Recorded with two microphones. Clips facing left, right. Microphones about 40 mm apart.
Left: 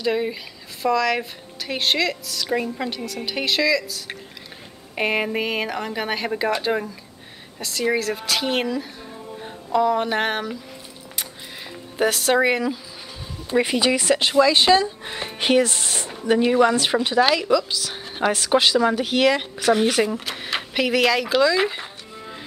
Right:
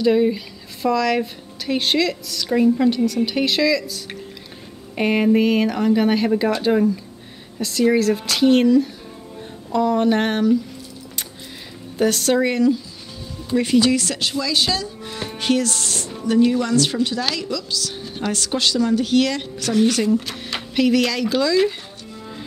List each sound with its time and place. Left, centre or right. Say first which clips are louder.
0.0 s speech: right 6 dB; centre
12.0 s a woman's voice: right 1 dB; centre
20.2 s speech: even; centre